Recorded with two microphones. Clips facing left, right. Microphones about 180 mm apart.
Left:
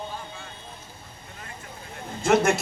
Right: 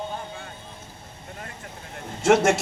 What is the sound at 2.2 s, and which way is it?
Speech, 80° right.